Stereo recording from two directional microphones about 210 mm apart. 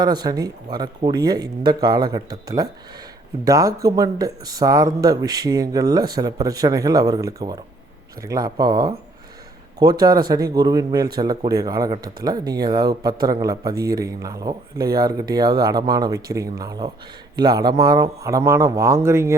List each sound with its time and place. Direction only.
0.0 s a man's voice: 20° right (ahead or behind)